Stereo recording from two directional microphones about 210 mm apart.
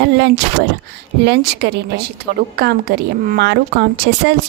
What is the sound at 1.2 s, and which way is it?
A woman's voice, 55° right (ahead or behind).